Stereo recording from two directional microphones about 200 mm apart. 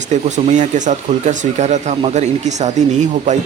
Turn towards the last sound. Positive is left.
turn(degrees=-35)  # may be behind; listen again after turning